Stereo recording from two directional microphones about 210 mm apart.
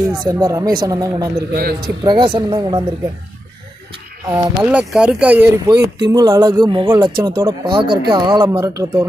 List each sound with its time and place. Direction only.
0.0 s speech: 15° right (ahead or behind)
1.5 s a man's voice: 50° right (ahead or behind)
2.0 s speech: 20° right (ahead or behind)
4.3 s speech: 5° right (ahead or behind)